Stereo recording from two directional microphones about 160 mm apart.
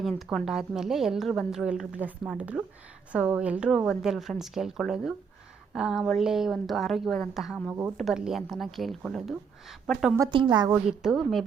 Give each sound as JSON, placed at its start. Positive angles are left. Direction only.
{"t": 0.0, "sound": "a woman's voice", "side_deg": 0}
{"t": 7.7, "sound": "speech", "side_deg": -15}
{"t": 7.9, "sound": "a woman's voice", "side_deg": 0}
{"t": 10.2, "sound": "a woman's voice", "side_deg": -30}
{"t": 10.7, "sound": "a woman's voice", "side_deg": -5}